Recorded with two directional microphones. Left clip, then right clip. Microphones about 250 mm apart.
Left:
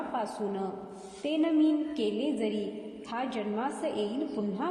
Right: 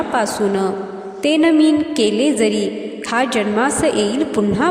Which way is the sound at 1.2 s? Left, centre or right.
Right.